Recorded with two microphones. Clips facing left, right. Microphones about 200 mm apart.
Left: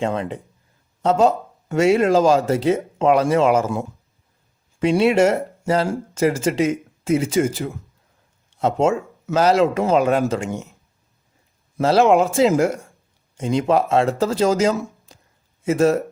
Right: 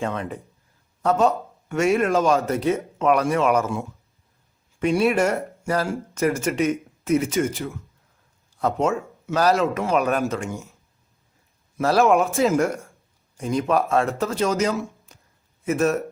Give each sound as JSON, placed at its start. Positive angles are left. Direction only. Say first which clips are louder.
{"t": 0.0, "sound": "speech", "louder": "left 4 dB", "side_deg": 30}
{"t": 4.9, "sound": "speech", "louder": "left 4 dB", "side_deg": 25}
{"t": 9.0, "sound": "speech", "louder": "left 3 dB", "side_deg": 20}
{"t": 11.8, "sound": "speech", "louder": "left 3 dB", "side_deg": 25}